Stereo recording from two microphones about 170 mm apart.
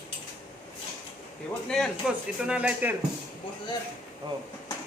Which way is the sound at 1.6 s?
5° left (ahead or behind).